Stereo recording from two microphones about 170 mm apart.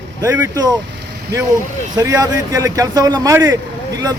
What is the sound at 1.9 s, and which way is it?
A man's voice, 20° right (ahead or behind).